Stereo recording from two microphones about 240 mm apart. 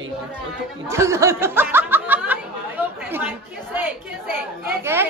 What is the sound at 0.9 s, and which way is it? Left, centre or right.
Speech, centre.